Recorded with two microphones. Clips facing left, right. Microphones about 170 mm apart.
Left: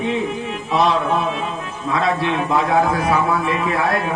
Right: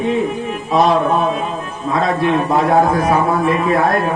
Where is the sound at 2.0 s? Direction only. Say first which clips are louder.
Right 4 dB; 45° right (ahead or behind).